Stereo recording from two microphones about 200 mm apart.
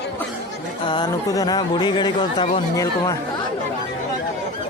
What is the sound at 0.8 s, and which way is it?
Speech, 20° left (ahead or behind).